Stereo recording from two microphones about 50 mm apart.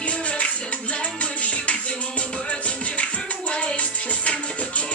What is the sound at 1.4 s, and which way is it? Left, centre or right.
Music, left.